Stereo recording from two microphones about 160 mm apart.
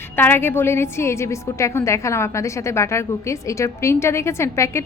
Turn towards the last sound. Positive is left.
turn(degrees=15)  # may be behind; listen again after turning